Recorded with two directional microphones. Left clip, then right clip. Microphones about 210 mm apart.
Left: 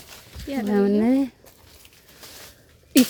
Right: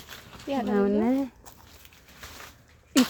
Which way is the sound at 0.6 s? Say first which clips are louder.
Left 5 dB; 55° left (ahead or behind).